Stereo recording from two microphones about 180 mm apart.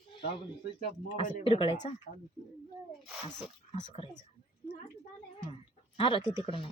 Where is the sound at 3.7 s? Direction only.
25° left (ahead or behind).